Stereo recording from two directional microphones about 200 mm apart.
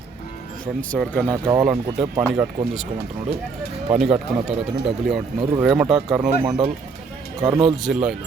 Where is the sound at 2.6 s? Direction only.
25° right (ahead or behind).